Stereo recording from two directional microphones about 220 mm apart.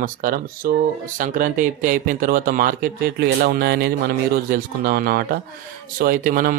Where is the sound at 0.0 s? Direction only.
40° right (ahead or behind).